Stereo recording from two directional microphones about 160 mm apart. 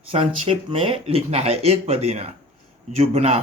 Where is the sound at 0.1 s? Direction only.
35° right (ahead or behind).